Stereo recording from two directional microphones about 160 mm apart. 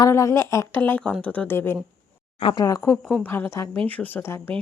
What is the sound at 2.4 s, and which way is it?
Speech, 25° left (ahead or behind).